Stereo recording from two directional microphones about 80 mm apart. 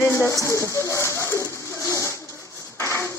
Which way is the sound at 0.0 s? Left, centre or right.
Left.